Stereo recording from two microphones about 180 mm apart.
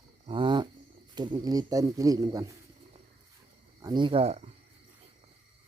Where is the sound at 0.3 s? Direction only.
25° right (ahead or behind).